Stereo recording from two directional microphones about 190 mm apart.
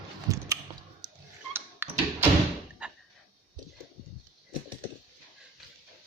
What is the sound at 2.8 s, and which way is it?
Cupboard open or close, 5° right (ahead or behind).